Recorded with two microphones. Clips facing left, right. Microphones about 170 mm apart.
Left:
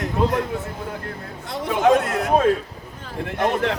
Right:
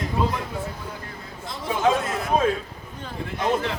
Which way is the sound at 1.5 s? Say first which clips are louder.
Left 5 dB; 70° left (ahead or behind).